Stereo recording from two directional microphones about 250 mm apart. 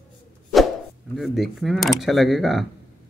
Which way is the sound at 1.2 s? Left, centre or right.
Centre.